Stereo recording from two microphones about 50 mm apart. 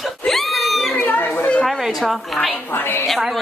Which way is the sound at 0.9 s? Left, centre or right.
Left.